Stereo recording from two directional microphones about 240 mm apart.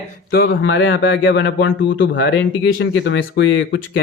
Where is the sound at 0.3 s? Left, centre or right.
Left.